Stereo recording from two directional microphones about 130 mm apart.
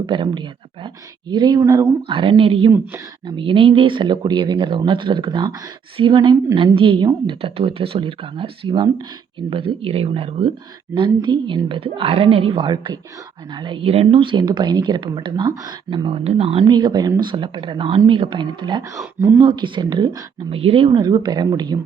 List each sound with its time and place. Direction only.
0.0 s speech: 40° right (ahead or behind)
2.0 s speech: 40° right (ahead or behind)
9.5 s speech: 45° right (ahead or behind)
10.9 s speech: 35° right (ahead or behind)
16.0 s speech: 50° right (ahead or behind)
16.6 s speech: 35° right (ahead or behind)
18.8 s speech: 25° right (ahead or behind)
19.4 s speech: 35° right (ahead or behind)